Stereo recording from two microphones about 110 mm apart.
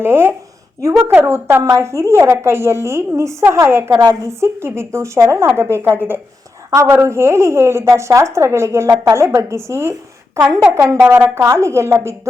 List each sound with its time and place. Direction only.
0.0 s a woman's voice: 20° right (ahead or behind)